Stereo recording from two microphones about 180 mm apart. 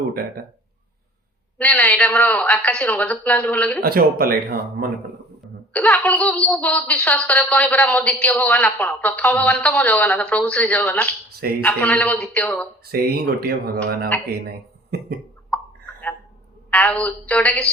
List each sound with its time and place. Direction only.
1.5 s a woman's voice: 5° left (ahead or behind)
3.8 s speech: 55° right (ahead or behind)
5.7 s a woman's voice: 10° left (ahead or behind)
12.8 s speech: 60° right (ahead or behind)
16.6 s a woman's voice: 10° left (ahead or behind)